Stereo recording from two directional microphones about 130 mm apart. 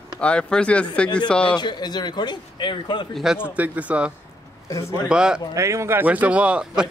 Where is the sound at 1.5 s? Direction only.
35° left (ahead or behind).